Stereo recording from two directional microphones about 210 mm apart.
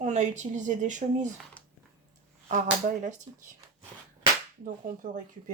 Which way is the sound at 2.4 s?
35° right (ahead or behind).